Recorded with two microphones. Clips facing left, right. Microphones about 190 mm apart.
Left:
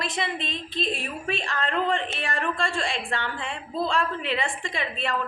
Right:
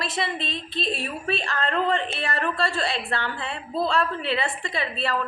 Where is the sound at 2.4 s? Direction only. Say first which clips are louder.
Right 2 dB; 5° right (ahead or behind).